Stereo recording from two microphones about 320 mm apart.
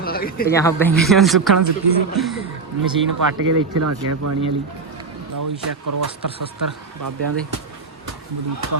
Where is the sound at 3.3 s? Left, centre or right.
Right.